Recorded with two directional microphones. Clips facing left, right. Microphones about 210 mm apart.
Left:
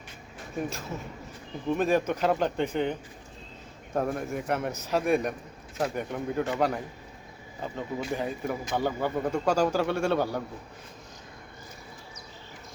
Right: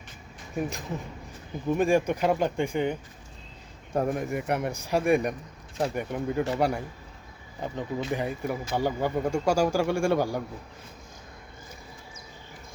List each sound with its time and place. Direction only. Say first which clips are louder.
0.7 s a man's voice: right 1 dB; 15° right (ahead or behind)